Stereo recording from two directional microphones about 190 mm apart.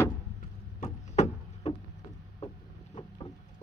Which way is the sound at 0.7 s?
40° left (ahead or behind).